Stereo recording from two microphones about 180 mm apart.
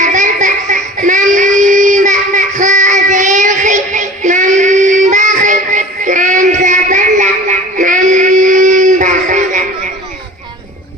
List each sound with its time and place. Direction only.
0.0 s child singing: 45° right (ahead or behind)